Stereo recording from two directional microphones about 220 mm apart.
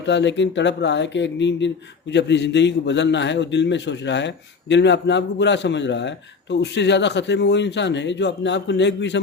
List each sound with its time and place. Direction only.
0.0 s speech: 55° left (ahead or behind)